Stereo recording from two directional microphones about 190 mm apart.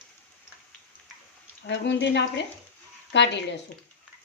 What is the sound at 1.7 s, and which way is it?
Speech, 65° left (ahead or behind).